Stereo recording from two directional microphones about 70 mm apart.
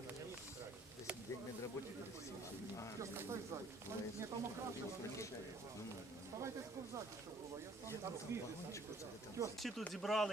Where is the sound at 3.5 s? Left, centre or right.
Right.